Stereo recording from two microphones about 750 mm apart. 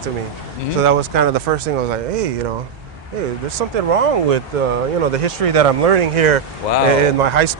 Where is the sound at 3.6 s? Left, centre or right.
Right.